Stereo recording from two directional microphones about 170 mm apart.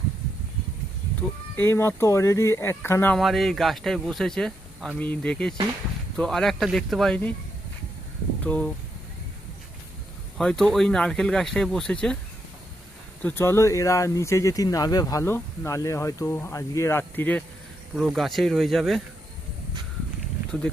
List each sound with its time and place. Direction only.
1.5 s speech: 15° left (ahead or behind)
3.2 s speech: centre (ahead or behind)
8.4 s speech: 10° left (ahead or behind)
10.3 s speech: 5° left (ahead or behind)
13.2 s speech: 15° left (ahead or behind)
17.9 s speech: centre (ahead or behind)